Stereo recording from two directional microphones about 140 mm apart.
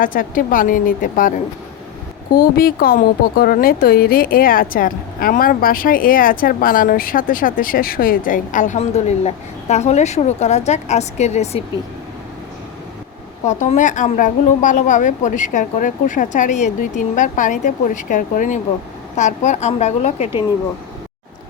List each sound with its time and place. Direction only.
0.0 s a woman's voice: 75° left (ahead or behind)
2.3 s a woman's voice: 90° left; by 11.6 s 55° left (ahead or behind)
13.4 s a woman's voice: 55° left (ahead or behind)